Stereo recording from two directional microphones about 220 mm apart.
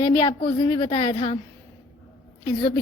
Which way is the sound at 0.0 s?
15° left (ahead or behind).